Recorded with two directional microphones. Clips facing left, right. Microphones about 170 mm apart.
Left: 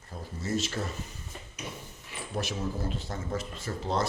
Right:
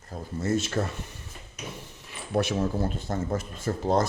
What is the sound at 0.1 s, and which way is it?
Speech, 50° right (ahead or behind).